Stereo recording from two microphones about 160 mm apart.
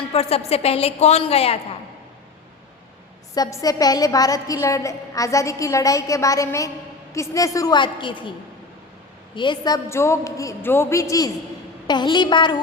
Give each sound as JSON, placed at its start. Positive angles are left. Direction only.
{"t": 0.1, "sound": "a woman's voice", "side_deg": 40}
{"t": 3.3, "sound": "a woman's voice", "side_deg": 25}
{"t": 9.3, "sound": "a woman's voice", "side_deg": 30}